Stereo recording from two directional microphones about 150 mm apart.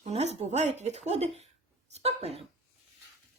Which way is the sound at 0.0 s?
45° right (ahead or behind).